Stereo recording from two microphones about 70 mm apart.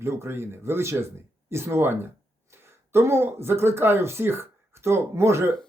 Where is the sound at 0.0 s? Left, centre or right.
Right.